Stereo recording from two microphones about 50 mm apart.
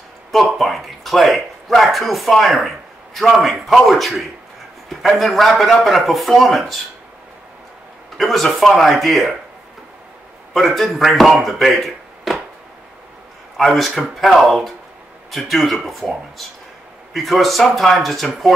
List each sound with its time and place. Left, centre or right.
0.3 s a man's voice: centre
8.2 s a man's voice: centre
10.5 s speech: centre
13.6 s a man's voice: centre